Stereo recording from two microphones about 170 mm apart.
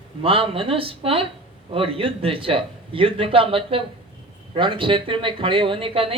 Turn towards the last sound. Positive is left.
turn(degrees=-35)  # may be behind; listen again after turning